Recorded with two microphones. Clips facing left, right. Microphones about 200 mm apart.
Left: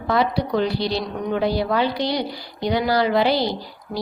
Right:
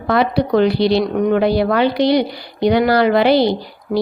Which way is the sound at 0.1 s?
65° right (ahead or behind).